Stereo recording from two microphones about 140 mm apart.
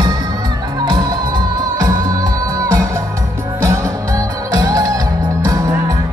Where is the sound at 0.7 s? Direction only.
30° right (ahead or behind).